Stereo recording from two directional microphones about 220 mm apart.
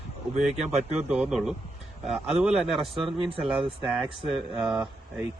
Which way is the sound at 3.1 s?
25° right (ahead or behind).